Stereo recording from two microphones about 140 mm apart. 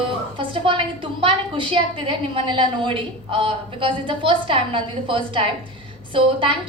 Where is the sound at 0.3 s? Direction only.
35° right (ahead or behind).